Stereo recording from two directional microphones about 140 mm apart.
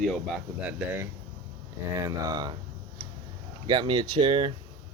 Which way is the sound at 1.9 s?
25° right (ahead or behind).